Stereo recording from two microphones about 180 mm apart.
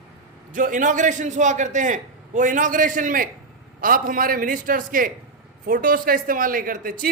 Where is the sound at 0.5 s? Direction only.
45° right (ahead or behind).